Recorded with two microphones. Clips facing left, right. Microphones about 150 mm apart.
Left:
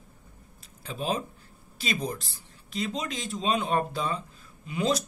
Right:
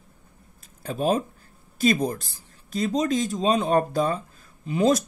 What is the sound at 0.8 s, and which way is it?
Speech, 45° right (ahead or behind).